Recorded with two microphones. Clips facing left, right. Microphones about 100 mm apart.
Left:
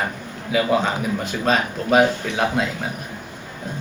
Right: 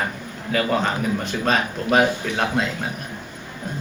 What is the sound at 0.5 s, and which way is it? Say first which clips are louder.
A man's voice: left 2 dB; 5° left (ahead or behind).